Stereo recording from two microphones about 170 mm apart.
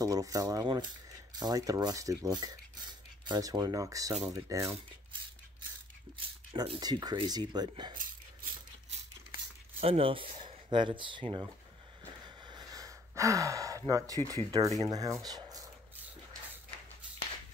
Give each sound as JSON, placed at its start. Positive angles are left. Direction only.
{"t": 0.0, "sound": "speech", "side_deg": -20}
{"t": 6.5, "sound": "speech", "side_deg": -25}
{"t": 8.0, "sound": "dog", "side_deg": -55}
{"t": 9.8, "sound": "speech", "side_deg": -35}
{"t": 12.5, "sound": "speech", "side_deg": -20}